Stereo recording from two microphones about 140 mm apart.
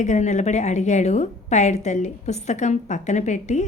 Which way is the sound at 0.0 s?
55° left (ahead or behind).